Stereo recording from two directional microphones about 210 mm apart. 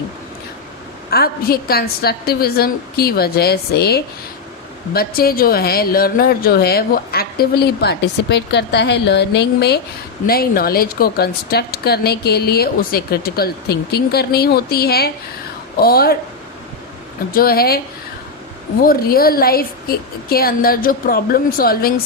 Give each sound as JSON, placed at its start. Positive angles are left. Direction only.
{"t": 1.1, "sound": "speech", "side_deg": 45}
{"t": 17.3, "sound": "speech", "side_deg": 45}
{"t": 18.8, "sound": "speech", "side_deg": 45}